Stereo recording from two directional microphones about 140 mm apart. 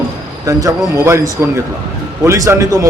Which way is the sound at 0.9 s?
20° right (ahead or behind).